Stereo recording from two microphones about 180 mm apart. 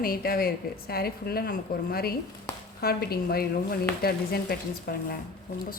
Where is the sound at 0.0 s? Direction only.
55° left (ahead or behind).